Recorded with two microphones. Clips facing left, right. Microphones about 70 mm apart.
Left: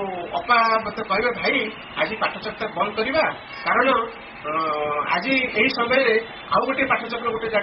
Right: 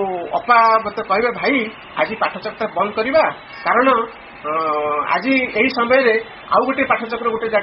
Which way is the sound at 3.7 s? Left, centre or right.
Right.